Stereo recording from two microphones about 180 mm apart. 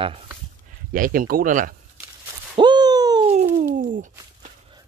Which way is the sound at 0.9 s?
50° right (ahead or behind).